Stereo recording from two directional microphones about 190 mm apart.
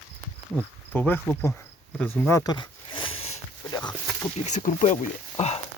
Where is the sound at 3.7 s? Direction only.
20° left (ahead or behind).